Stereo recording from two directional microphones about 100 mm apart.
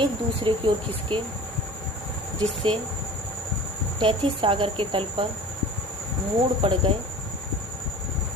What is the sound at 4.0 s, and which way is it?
Speech, 65° right (ahead or behind).